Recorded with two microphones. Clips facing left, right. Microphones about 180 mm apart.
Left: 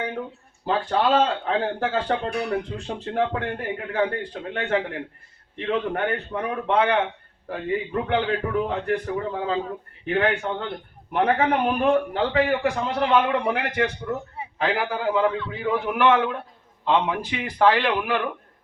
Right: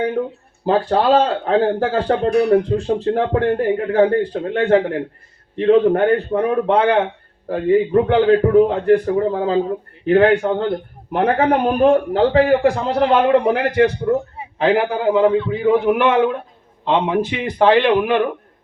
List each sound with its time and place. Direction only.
0.2 s a man's voice: 40° right (ahead or behind)
5.5 s a man's voice: 35° right (ahead or behind)
14.6 s a man's voice: 25° right (ahead or behind)